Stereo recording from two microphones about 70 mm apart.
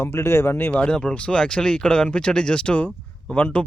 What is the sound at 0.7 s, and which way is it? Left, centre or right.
Speech, centre.